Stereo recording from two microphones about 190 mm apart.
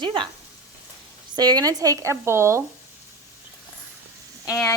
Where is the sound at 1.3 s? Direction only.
20° right (ahead or behind).